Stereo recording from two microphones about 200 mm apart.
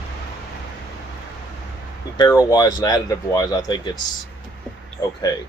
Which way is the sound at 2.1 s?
20° left (ahead or behind).